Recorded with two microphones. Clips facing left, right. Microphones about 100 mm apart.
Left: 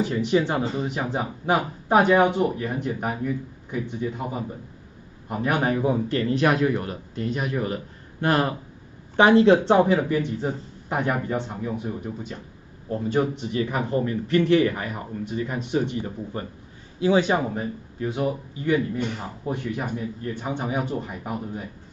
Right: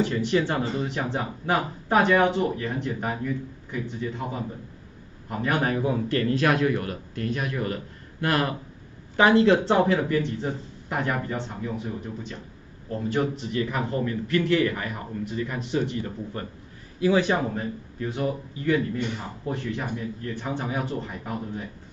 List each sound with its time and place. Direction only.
0.0 s a man's voice: 10° left (ahead or behind); by 9.8 s 30° left (ahead or behind)
9.8 s speech: 10° left (ahead or behind)
11.3 s speech: 5° left (ahead or behind)
13.5 s a man's voice: 20° left (ahead or behind)